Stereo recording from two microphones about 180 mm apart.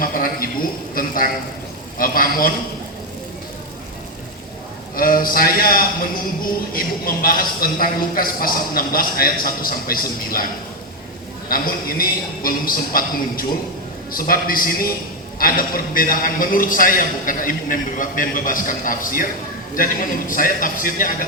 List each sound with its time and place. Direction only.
0.0 s a sound: 50° left (ahead or behind)
0.9 s a man's voice: 50° left (ahead or behind)
4.9 s a man's voice: 50° left (ahead or behind)
11.4 s a man's voice: 55° left (ahead or behind)